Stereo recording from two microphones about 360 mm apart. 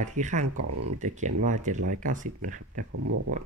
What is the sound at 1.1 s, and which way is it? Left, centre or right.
Speech, centre.